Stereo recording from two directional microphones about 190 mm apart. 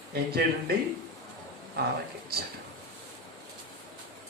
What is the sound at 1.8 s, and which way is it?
Speech, 55° right (ahead or behind).